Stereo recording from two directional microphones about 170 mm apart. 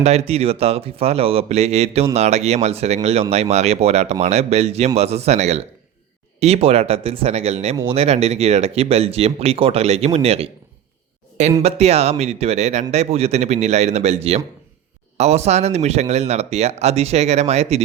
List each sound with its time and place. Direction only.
0.0 s speech: 40° right (ahead or behind)
11.6 s speech: 40° right (ahead or behind)